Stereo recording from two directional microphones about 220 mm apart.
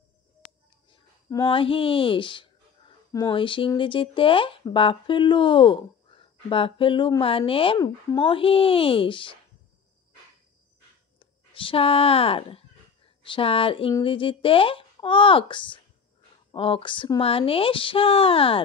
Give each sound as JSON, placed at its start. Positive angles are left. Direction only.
{"t": 0.8, "sound": "speech", "side_deg": 20}
{"t": 11.1, "sound": "speech", "side_deg": 25}